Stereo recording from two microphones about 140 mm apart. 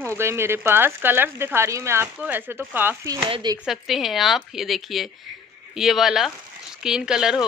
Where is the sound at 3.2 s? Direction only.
35° right (ahead or behind).